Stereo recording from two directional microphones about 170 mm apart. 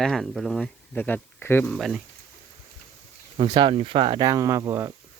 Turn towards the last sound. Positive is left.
turn(degrees=-15)  # may be behind; listen again after turning